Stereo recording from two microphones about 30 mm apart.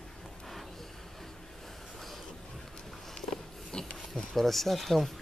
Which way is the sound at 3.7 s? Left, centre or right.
Left.